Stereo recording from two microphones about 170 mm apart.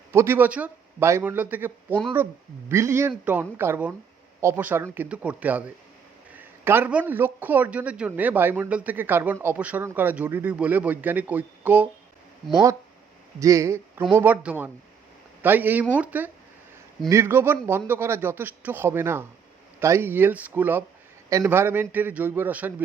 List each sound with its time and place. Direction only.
0.1 s speech: 15° right (ahead or behind)
13.4 s speech: 20° right (ahead or behind)